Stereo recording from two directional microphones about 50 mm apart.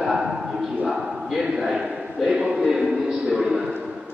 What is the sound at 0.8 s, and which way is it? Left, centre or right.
A man's voice, centre.